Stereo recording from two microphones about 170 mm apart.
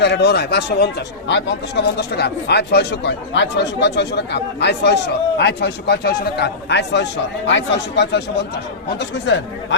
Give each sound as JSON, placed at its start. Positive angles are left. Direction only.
{"t": 0.0, "sound": "speech", "side_deg": 80}